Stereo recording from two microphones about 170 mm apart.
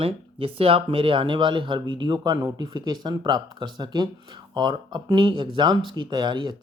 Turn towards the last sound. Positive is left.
turn(degrees=-25)  # may be behind; listen again after turning